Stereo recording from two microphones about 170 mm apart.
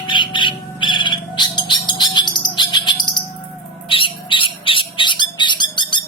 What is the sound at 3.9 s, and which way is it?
Squawk, 30° left (ahead or behind).